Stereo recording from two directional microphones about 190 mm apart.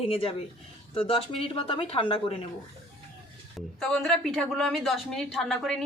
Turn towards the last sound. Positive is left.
turn(degrees=0)  # may be behind; listen again after turning